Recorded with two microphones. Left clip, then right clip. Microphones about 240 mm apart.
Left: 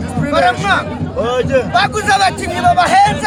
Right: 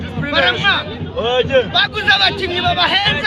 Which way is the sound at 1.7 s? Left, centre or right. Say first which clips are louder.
Left 1 dB; left.